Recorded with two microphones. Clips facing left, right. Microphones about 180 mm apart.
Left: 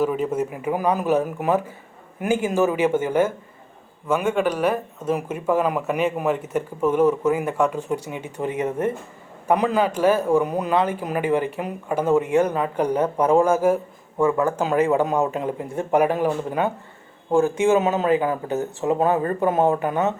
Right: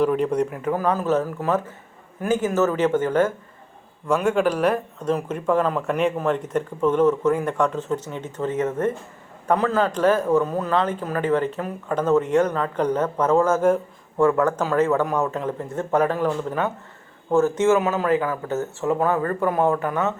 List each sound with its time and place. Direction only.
0.0 s speech: 5° left (ahead or behind)